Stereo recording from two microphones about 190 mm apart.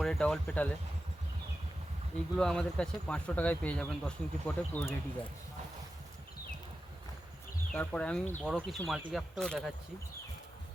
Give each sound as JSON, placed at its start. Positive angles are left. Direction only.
{"t": 0.0, "sound": "speech", "side_deg": 0}
{"t": 2.3, "sound": "speech", "side_deg": 5}
{"t": 7.7, "sound": "speech", "side_deg": 5}